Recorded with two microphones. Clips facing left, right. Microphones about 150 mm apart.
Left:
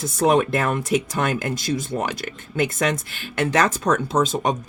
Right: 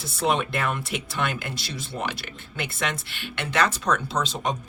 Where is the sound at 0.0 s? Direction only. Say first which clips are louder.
Left 7 dB; 45° left (ahead or behind).